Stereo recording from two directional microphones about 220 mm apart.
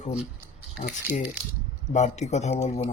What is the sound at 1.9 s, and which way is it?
Speech, 30° left (ahead or behind).